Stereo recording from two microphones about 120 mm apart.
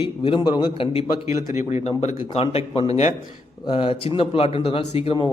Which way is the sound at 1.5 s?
65° left (ahead or behind).